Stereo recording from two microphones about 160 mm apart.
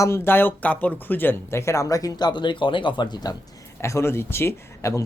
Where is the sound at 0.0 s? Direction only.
15° left (ahead or behind).